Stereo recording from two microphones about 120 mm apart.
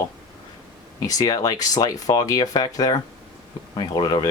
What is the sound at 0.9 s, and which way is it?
Speech, 30° left (ahead or behind).